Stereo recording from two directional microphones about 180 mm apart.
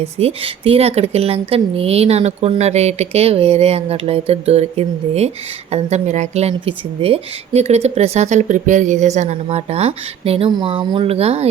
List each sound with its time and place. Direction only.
0.2 s a woman's voice: 35° right (ahead or behind)